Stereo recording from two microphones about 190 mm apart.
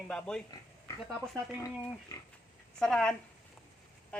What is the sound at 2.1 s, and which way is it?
Speech, 20° left (ahead or behind).